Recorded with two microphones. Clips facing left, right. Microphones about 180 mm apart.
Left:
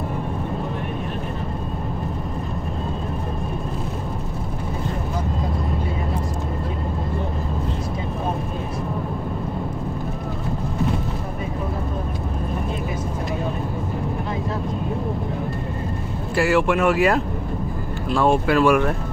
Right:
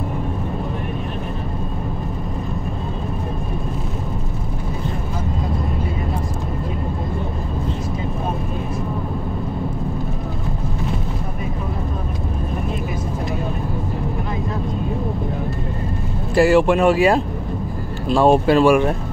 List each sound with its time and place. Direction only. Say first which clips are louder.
16.3 s speech: right 5 dB; 35° right (ahead or behind)